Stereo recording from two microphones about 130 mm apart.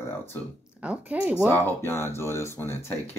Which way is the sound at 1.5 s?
15° left (ahead or behind).